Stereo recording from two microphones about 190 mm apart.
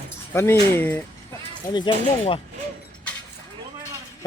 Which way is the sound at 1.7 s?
25° left (ahead or behind).